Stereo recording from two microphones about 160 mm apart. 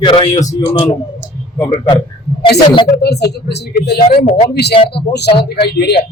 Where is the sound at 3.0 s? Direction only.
90° left.